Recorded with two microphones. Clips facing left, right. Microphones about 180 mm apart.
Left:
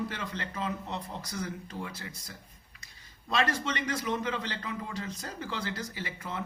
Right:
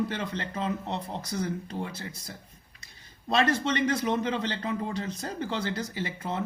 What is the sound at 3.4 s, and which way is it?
Speech, 25° right (ahead or behind).